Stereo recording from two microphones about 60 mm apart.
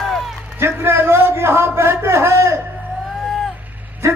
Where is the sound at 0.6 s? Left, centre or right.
Right.